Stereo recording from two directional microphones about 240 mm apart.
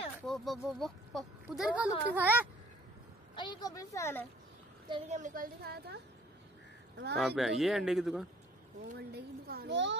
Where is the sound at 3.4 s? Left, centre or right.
Centre.